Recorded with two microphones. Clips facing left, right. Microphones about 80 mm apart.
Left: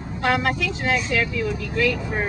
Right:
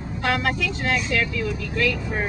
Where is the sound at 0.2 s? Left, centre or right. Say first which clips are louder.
Left 2 dB; centre.